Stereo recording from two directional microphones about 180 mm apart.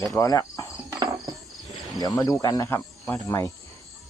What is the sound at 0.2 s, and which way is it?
Speech, 20° left (ahead or behind).